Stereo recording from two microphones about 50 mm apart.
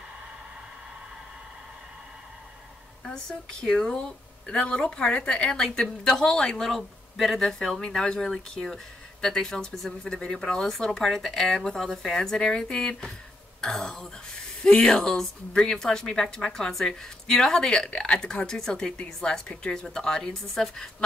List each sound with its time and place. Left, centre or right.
3.6 s speech: centre
8.0 s speech: centre
12.2 s speech: centre